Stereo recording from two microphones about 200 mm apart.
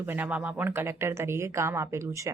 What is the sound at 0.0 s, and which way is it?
A woman's voice, 10° right (ahead or behind).